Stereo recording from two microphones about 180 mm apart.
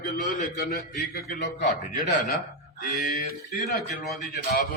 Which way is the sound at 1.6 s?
50° left (ahead or behind).